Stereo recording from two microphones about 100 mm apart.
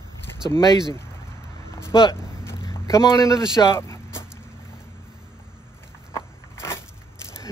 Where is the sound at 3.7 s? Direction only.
25° left (ahead or behind).